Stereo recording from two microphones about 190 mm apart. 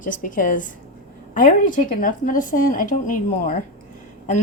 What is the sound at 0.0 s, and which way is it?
A woman's voice, 45° left (ahead or behind).